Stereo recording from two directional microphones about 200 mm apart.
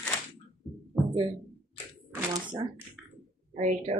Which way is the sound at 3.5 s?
35° right (ahead or behind).